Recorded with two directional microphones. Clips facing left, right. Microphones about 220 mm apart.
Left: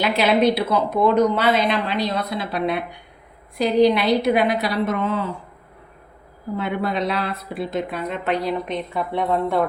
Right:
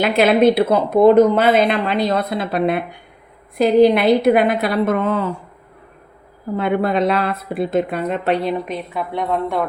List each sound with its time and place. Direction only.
0.0 s speech: 50° right (ahead or behind)
6.6 s speech: 55° right (ahead or behind); by 8.5 s 30° right (ahead or behind)
8.6 s a woman's voice: 5° right (ahead or behind)